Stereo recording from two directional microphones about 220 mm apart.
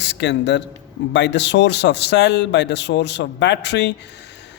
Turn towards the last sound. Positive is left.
turn(degrees=50)  # may be behind; listen again after turning